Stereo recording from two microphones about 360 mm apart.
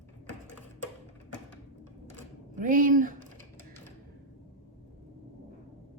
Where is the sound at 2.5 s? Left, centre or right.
Right.